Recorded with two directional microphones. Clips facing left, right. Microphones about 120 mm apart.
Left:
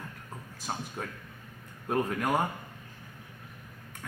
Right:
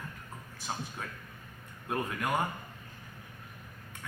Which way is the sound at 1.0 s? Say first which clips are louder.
Left 3 dB; 40° left (ahead or behind).